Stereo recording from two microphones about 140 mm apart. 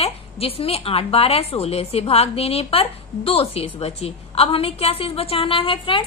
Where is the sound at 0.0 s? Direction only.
45° left (ahead or behind).